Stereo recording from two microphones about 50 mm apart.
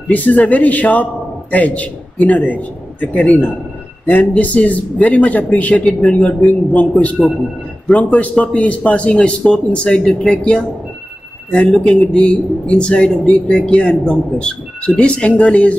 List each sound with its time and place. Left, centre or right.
0.1 s a man's voice: left
5.9 s a man's voice: centre
6.1 s speech: left
7.9 s speech: left
11.8 s speech: centre